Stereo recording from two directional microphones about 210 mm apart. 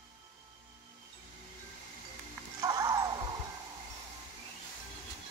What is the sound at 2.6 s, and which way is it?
Music, 15° right (ahead or behind).